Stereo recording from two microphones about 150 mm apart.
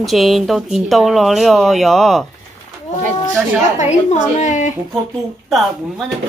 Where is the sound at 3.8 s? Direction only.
50° left (ahead or behind).